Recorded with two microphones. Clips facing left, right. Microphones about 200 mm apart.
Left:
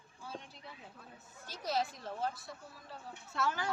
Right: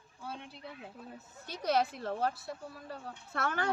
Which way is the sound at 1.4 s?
65° right (ahead or behind).